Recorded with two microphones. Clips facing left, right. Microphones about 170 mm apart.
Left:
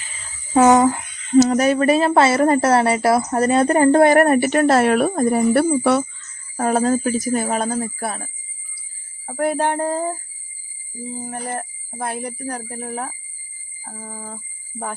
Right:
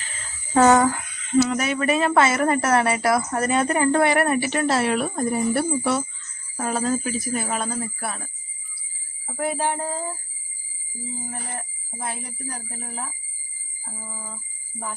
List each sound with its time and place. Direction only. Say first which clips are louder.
0.5 s a sound: left 3 dB; 15° left (ahead or behind)
1.3 s speech: left 6 dB; 40° left (ahead or behind); by 6.1 s 65° left (ahead or behind)
6.6 s speech: left 6 dB; 50° left (ahead or behind)
9.2 s speech: left 5 dB; 55° left (ahead or behind)
11.2 s speech: left 10 dB; 50° left (ahead or behind)